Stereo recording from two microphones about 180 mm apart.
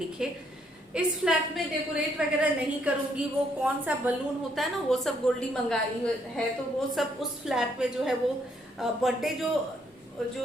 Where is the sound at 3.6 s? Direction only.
10° right (ahead or behind).